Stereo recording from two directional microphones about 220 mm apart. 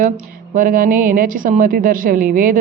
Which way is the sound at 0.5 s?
40° right (ahead or behind).